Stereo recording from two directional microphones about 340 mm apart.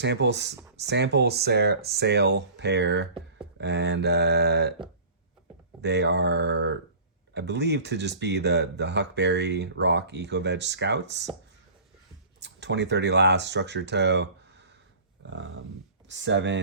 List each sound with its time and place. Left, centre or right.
0.0 s speech: right
5.8 s speech: right
12.4 s speech: right
15.2 s a sound: right
16.0 s speech: right